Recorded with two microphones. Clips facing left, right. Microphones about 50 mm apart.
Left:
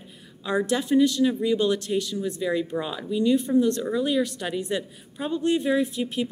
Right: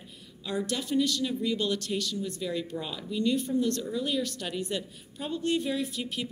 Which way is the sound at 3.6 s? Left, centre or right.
Left.